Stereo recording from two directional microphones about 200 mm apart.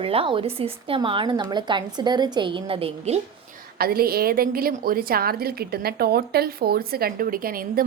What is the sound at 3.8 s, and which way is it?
A woman's voice, 50° right (ahead or behind).